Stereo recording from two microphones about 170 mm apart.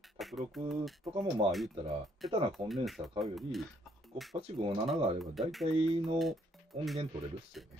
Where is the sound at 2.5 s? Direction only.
Centre (ahead or behind).